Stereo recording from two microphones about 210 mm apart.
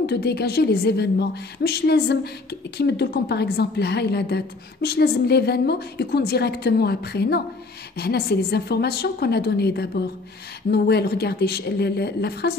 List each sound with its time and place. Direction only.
0.0 s a woman's voice: 50° left (ahead or behind)